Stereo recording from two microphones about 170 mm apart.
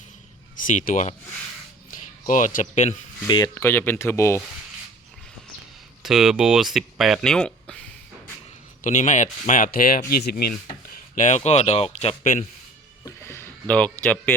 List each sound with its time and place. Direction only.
0.7 s speech: 50° left (ahead or behind)
3.2 s speech: 25° left (ahead or behind)
6.0 s speech: 5° right (ahead or behind)
8.8 s speech: 45° left (ahead or behind); by 10.5 s 70° left (ahead or behind)
10.8 s speech: 55° left (ahead or behind); by 12.1 s 35° left (ahead or behind)
12.2 s speech: 50° left (ahead or behind)
13.1 s a sound: 15° left (ahead or behind)
14.0 s speech: 10° left (ahead or behind)